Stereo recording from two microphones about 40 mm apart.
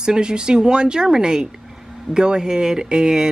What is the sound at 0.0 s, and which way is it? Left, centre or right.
Speech, centre.